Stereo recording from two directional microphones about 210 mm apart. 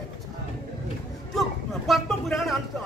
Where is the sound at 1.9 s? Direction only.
Centre (ahead or behind).